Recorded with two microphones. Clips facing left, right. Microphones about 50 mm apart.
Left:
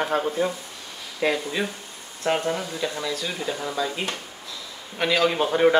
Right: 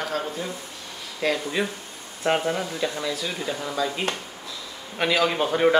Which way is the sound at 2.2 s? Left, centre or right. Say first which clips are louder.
Right 1 dB; centre.